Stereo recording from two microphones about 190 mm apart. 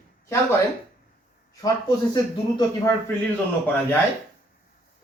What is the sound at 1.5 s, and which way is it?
Speech, 20° left (ahead or behind).